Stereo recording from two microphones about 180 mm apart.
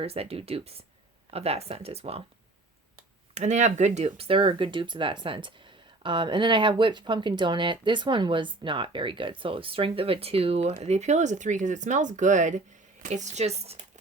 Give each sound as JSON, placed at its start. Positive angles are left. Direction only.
{"t": 0.0, "sound": "speech", "side_deg": -35}
{"t": 3.3, "sound": "speech", "side_deg": -40}